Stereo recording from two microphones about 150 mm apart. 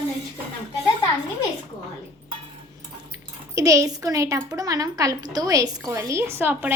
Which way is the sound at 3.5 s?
20° right (ahead or behind).